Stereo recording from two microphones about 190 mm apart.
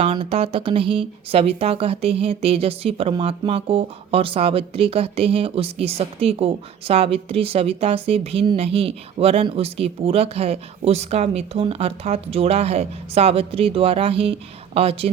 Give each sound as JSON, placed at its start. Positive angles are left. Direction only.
{"t": 0.0, "sound": "speech", "side_deg": -30}